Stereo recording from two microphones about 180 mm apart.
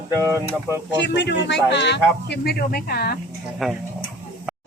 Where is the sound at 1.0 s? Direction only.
70° left (ahead or behind).